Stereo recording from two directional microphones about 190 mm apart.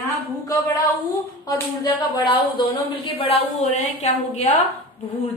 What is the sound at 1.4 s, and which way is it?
A woman's voice, 20° left (ahead or behind).